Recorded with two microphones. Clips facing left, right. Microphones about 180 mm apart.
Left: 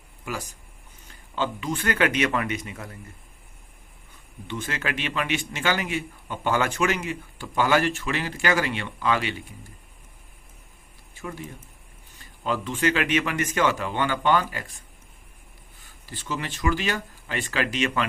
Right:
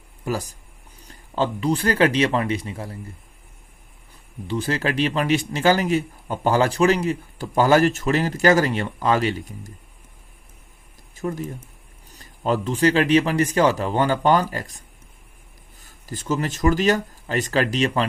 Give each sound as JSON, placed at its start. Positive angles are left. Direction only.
{"t": 0.3, "sound": "a man's voice", "side_deg": -35}
{"t": 4.4, "sound": "a man's voice", "side_deg": -35}
{"t": 11.1, "sound": "a sound", "side_deg": -40}
{"t": 12.1, "sound": "a man's voice", "side_deg": -40}